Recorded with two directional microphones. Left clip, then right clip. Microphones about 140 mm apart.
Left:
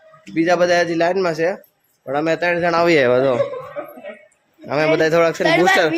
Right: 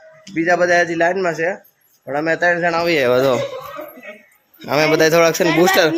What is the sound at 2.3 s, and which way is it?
Speech, 20° right (ahead or behind).